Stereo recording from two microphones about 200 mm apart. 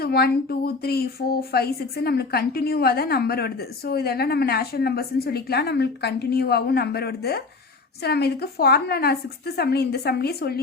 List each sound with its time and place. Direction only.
0.0 s speech: 50° left (ahead or behind)